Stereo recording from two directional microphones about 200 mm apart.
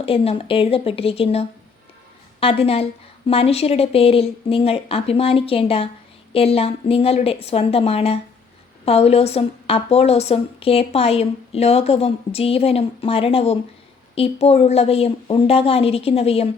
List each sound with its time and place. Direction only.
0.0 s a woman's voice: 30° left (ahead or behind)